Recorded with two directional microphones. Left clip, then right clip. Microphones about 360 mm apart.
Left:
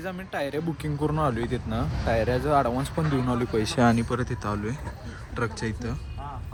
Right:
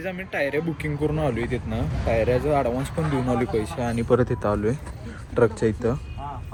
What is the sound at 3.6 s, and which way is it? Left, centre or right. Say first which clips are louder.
Speech: left 6 dB; left.